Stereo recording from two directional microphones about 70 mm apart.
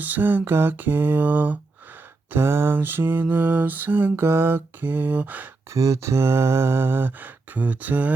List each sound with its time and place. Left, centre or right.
0.0 s mantra: right
2.3 s mantra: right
5.7 s a sound: right